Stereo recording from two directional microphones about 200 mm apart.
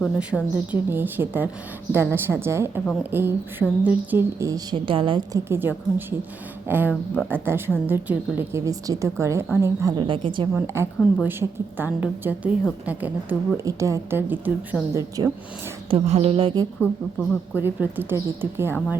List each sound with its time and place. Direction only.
0.2 s speech: 5° right (ahead or behind); by 5.4 s 25° right (ahead or behind)
5.5 s a woman's voice: 10° right (ahead or behind)
10.5 s speech: 10° right (ahead or behind)
15.9 s a woman's voice: 35° right (ahead or behind)
17.5 s speech: 10° right (ahead or behind)